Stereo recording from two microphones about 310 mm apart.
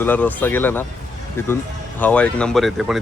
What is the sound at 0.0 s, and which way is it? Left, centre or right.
Speech, centre.